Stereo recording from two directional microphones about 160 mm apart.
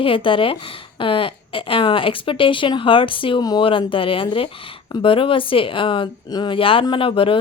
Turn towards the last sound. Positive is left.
turn(degrees=35)  # may be behind; listen again after turning